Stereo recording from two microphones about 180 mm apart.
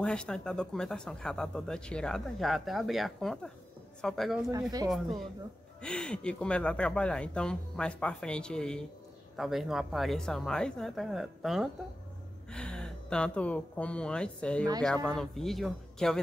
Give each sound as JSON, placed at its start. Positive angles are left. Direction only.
{"t": 0.0, "sound": "speech", "side_deg": 5}
{"t": 4.5, "sound": "speech", "side_deg": -20}
{"t": 4.8, "sound": "speech", "side_deg": 0}